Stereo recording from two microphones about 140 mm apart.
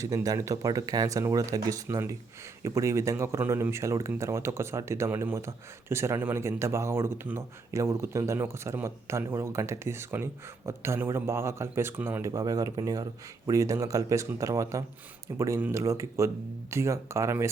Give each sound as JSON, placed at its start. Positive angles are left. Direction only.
{"t": 0.0, "sound": "speech", "side_deg": -25}